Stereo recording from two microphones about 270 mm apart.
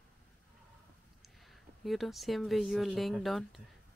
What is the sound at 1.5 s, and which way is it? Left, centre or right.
Speech, centre.